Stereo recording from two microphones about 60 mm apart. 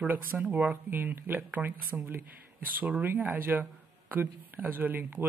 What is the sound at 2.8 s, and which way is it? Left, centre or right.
Speech, right.